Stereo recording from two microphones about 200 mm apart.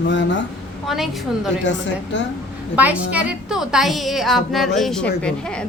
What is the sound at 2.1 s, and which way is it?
Speech, 60° left (ahead or behind).